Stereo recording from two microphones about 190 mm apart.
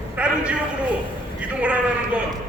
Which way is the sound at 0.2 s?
5° right (ahead or behind).